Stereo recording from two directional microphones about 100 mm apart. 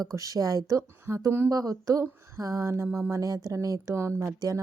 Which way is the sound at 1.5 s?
35° right (ahead or behind).